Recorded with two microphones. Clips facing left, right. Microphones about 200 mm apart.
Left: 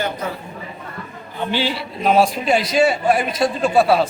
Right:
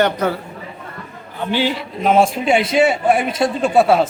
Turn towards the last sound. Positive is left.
turn(degrees=-25)  # may be behind; listen again after turning